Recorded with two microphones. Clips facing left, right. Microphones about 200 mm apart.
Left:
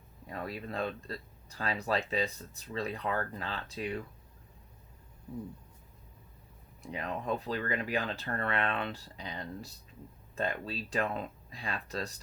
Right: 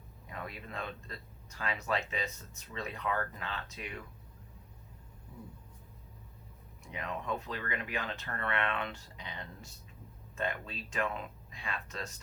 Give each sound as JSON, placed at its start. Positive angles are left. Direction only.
{"t": 0.3, "sound": "speech", "side_deg": 35}
{"t": 6.8, "sound": "speech", "side_deg": 35}